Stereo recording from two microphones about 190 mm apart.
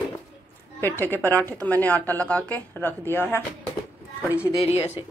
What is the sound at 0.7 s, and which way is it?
A woman's voice, 10° left (ahead or behind).